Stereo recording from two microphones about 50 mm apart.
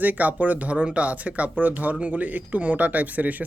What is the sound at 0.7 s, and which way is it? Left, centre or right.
Speech, right.